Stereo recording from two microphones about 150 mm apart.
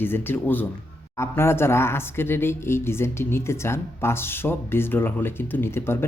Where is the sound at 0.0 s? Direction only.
15° left (ahead or behind).